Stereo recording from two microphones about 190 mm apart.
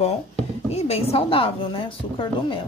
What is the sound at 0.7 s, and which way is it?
Speech, 30° left (ahead or behind).